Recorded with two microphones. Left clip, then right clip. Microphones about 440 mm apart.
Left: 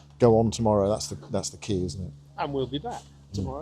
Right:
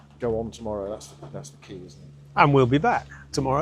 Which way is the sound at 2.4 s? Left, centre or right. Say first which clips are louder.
Right 11 dB; right.